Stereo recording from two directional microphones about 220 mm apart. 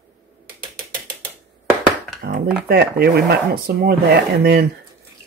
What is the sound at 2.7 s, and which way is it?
Speech, 45° right (ahead or behind).